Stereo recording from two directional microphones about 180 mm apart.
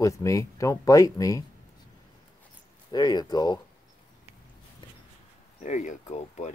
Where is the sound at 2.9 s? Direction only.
20° left (ahead or behind).